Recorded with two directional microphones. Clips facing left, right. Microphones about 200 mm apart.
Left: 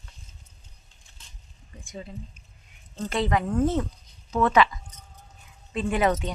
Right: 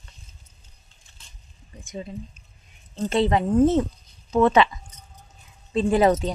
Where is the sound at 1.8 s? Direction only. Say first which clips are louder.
Right 5 dB; 20° right (ahead or behind).